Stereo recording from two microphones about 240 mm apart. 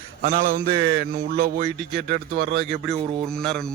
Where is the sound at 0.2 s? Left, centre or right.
Right.